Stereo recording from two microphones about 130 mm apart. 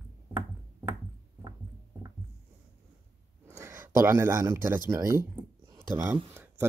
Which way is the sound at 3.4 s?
20° right (ahead or behind).